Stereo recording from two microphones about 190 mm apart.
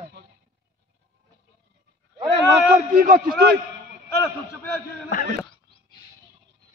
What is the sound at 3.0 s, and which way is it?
Speech, 45° right (ahead or behind).